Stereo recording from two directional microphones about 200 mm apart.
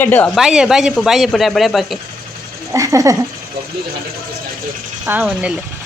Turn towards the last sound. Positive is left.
turn(degrees=-5)  # may be behind; listen again after turning